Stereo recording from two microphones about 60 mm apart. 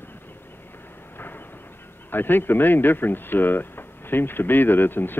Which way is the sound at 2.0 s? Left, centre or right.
Left.